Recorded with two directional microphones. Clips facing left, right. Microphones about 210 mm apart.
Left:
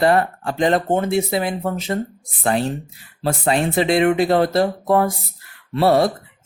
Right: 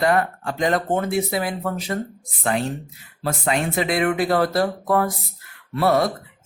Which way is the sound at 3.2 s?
30° left (ahead or behind).